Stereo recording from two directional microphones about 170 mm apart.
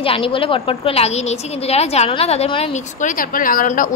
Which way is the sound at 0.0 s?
30° left (ahead or behind).